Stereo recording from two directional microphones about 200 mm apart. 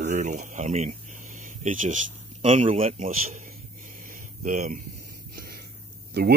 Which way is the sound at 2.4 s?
35° right (ahead or behind).